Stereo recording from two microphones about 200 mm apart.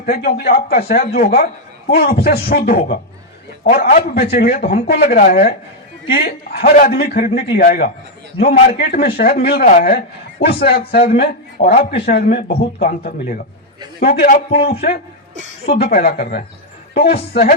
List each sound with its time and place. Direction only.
0.0 s a man's voice: 50° left (ahead or behind)
15.8 s a man's voice: 50° left (ahead or behind)